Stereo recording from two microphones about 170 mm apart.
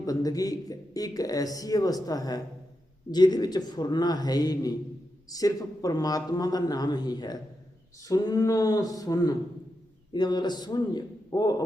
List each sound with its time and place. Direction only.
0.0 s a man's voice: 20° left (ahead or behind)